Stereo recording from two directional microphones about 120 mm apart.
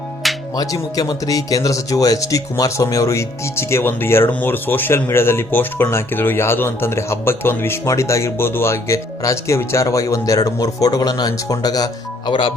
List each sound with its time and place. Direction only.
0.5 s speech: 30° left (ahead or behind)